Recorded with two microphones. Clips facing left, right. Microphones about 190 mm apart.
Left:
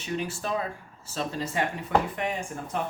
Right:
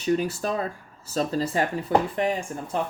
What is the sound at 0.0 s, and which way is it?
Speech, 40° right (ahead or behind).